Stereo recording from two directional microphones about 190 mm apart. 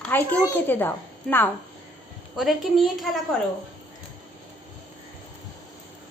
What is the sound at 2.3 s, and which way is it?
Speech, centre (ahead or behind).